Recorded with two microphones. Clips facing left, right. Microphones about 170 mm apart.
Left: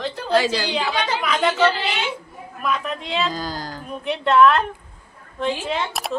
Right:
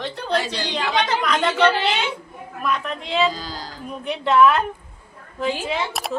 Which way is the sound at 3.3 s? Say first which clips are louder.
Left 5 dB; 50° left (ahead or behind).